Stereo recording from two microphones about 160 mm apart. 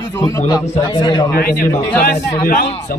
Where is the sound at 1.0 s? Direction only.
30° left (ahead or behind).